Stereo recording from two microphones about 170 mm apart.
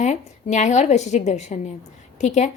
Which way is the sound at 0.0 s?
45° left (ahead or behind).